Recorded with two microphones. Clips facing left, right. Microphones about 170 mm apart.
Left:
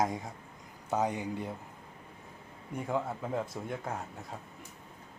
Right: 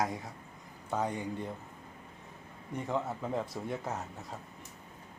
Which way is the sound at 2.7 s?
5° left (ahead or behind).